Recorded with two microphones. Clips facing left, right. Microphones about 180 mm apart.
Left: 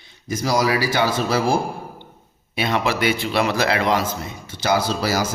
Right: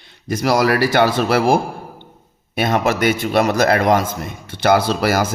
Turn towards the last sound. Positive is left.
turn(degrees=-55)  # may be behind; listen again after turning